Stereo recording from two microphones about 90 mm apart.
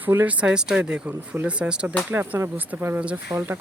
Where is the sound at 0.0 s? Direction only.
20° right (ahead or behind).